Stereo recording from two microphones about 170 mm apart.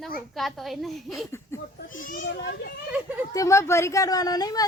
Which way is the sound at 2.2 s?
80° left.